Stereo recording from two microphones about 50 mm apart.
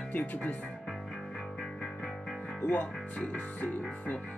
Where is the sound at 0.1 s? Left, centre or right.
Left.